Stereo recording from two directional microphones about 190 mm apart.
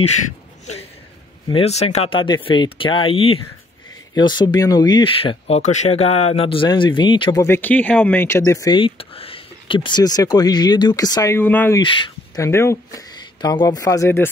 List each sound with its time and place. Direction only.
1.5 s speech: 35° left (ahead or behind)
7.4 s speech: 10° left (ahead or behind)
11.8 s speech: 25° left (ahead or behind)
12.4 s speech: 15° left (ahead or behind)